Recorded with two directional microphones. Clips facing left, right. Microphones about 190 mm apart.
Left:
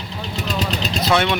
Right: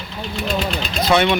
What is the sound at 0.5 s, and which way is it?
Speech, 40° left (ahead or behind).